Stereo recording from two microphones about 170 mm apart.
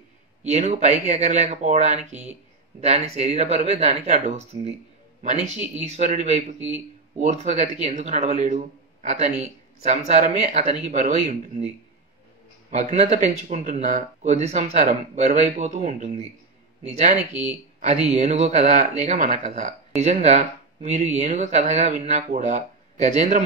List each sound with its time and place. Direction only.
0.5 s speech: 40° right (ahead or behind)
12.7 s speech: 45° right (ahead or behind)
17.2 s speech: 10° right (ahead or behind)
18.1 s speech: 45° right (ahead or behind)